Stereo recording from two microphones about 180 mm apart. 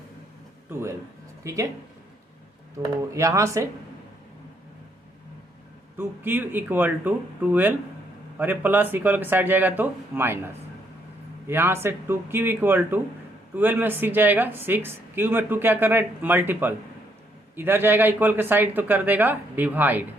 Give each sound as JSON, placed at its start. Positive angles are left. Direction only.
{"t": 0.7, "sound": "speech", "side_deg": -15}
{"t": 3.0, "sound": "speech", "side_deg": -15}
{"t": 6.0, "sound": "speech", "side_deg": -10}
{"t": 11.4, "sound": "speech", "side_deg": -15}